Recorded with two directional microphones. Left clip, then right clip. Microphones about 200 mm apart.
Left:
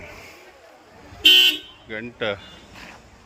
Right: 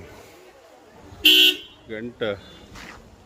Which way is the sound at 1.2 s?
70° right (ahead or behind).